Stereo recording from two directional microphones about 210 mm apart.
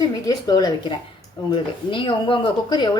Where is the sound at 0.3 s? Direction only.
20° left (ahead or behind).